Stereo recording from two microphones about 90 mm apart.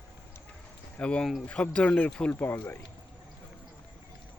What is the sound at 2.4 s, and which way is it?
Speech, 25° left (ahead or behind).